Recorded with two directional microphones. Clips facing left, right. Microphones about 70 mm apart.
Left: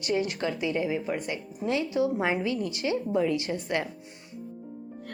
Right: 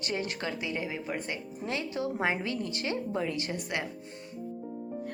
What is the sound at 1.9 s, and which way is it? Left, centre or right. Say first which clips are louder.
A woman's voice: left 2 dB; right.